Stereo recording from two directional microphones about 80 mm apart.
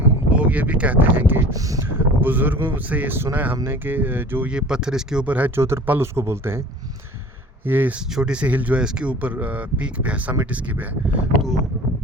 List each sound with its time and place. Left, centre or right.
0.3 s speech: centre
1.5 s speech: right
1.9 s speech: right
4.4 s speech: centre
5.5 s speech: right
7.6 s speech: right
8.1 s speech: centre